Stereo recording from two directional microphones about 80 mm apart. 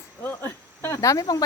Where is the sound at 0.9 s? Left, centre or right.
Left.